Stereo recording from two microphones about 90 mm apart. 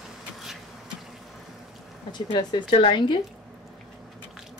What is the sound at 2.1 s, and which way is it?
Speech, 55° left (ahead or behind).